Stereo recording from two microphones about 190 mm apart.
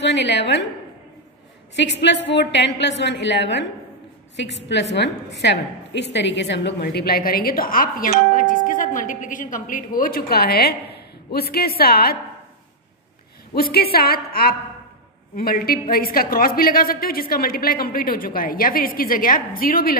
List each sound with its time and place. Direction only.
0.0 s a woman's voice: 65° left (ahead or behind)
1.8 s a woman's voice: 65° left (ahead or behind)
13.6 s a woman's voice: 55° left (ahead or behind)